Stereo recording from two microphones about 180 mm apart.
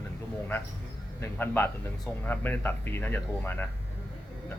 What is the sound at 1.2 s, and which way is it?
A man's voice, 10° left (ahead or behind).